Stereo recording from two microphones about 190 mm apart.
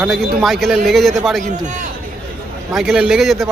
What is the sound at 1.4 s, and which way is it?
Speech, 40° right (ahead or behind).